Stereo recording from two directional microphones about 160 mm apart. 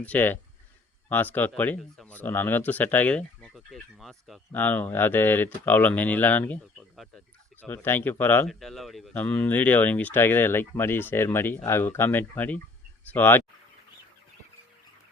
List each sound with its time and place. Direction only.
0.0 s speech: 10° left (ahead or behind)
4.5 s speech: 10° left (ahead or behind)
8.4 s speech: centre (ahead or behind)